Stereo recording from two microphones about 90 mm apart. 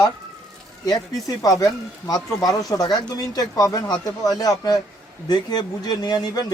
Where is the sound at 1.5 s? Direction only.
40° left (ahead or behind).